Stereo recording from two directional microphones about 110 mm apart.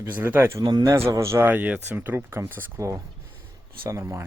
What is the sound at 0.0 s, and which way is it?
Speech, 15° right (ahead or behind).